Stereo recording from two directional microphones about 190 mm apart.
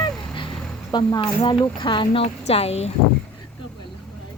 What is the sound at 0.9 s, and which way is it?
A woman's voice, 25° left (ahead or behind).